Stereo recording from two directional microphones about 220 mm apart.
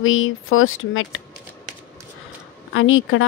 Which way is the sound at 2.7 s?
65° left (ahead or behind).